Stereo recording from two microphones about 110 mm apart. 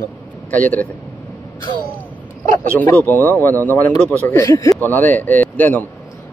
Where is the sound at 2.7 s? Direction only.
15° left (ahead or behind).